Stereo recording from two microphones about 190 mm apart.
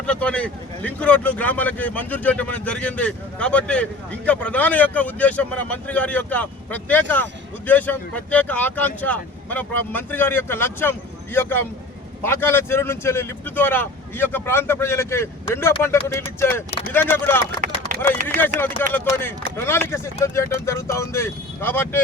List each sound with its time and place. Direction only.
0.0 s speech: 5° left (ahead or behind)
17.6 s a sound: 45° right (ahead or behind)
18.9 s speech: 10° left (ahead or behind)